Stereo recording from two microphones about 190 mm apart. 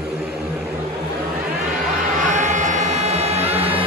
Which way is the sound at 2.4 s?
40° right (ahead or behind).